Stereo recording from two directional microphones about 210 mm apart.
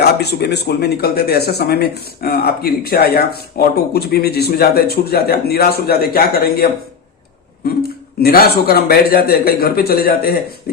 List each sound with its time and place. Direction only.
0.0 s speech: 50° left (ahead or behind)
8.2 s speech: 45° left (ahead or behind)